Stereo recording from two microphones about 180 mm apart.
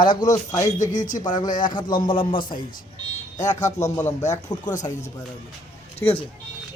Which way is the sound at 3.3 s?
40° left (ahead or behind).